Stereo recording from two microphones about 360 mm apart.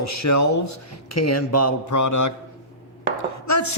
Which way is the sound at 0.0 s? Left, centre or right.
Left.